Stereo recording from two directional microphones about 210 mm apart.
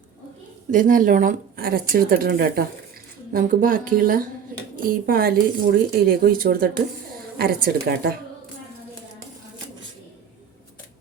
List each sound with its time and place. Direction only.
0.7 s speech: 40° right (ahead or behind)